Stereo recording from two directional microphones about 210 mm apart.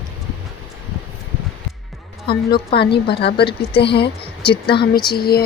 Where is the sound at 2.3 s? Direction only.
50° left (ahead or behind).